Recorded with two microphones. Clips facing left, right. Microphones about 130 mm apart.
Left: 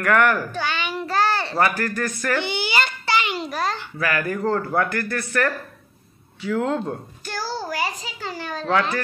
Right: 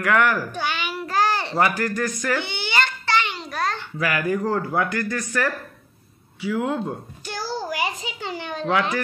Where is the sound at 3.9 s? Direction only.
15° right (ahead or behind).